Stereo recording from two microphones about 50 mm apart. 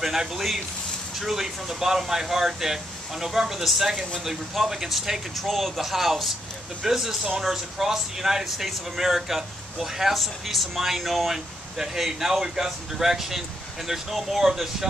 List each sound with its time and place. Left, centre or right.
0.0 s speech: centre